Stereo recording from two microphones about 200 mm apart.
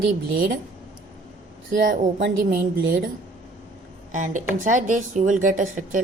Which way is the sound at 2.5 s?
45° right (ahead or behind).